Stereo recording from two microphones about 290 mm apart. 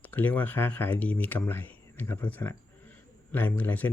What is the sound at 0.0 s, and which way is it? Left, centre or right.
Speech, centre.